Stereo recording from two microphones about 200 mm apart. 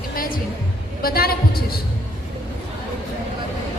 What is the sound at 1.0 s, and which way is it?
Speech, 50° left (ahead or behind).